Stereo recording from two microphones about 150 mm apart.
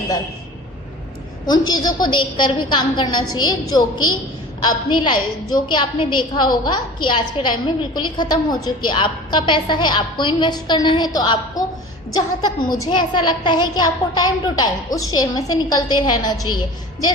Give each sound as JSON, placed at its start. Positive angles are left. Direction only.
{"t": 1.5, "sound": "a woman's voice", "side_deg": 25}